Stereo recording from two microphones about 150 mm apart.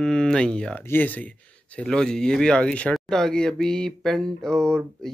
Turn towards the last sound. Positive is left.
turn(degrees=5)  # may be behind; listen again after turning